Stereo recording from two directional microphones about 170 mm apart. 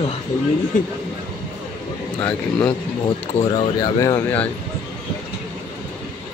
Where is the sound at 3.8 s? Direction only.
20° left (ahead or behind).